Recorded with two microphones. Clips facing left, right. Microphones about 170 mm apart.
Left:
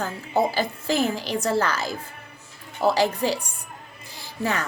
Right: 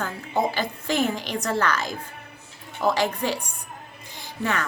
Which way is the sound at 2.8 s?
35° left (ahead or behind).